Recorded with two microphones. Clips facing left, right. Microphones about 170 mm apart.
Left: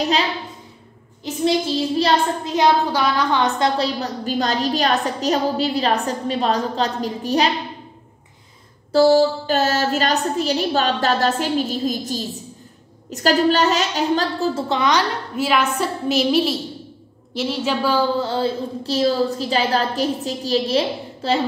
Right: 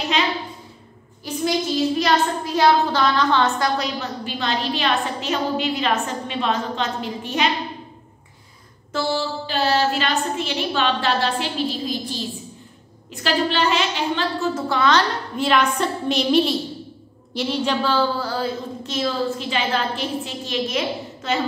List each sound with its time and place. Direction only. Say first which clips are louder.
1.2 s child singing: left 1 dB; 20° left (ahead or behind)
2.0 s a woman's voice: left 1 dB; 30° left (ahead or behind)
2.5 s a woman's voice: even; 15° left (ahead or behind); by 7.4 s 35° left (ahead or behind)
8.9 s a woman's voice: left 10 dB; 40° left (ahead or behind)
14.7 s a woman's voice: right 2 dB; 15° left (ahead or behind); by 21.4 s 30° left (ahead or behind)